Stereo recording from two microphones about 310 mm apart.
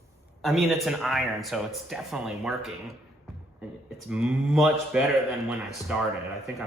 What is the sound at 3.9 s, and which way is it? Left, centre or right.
A man's voice, centre.